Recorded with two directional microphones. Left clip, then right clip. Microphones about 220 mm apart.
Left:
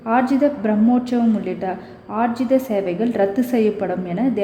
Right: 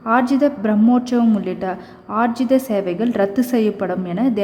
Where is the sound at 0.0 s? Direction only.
10° right (ahead or behind).